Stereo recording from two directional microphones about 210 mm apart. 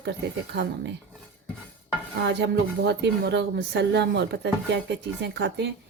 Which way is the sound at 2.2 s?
55° right (ahead or behind).